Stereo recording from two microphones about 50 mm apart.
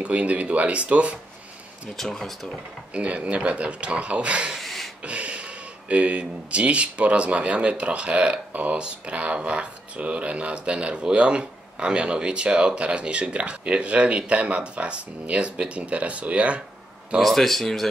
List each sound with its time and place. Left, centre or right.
0.0 s speech: right
2.0 s speech: centre
2.9 s speech: right
4.6 s a sound: centre
5.0 s speech: right
17.2 s speech: centre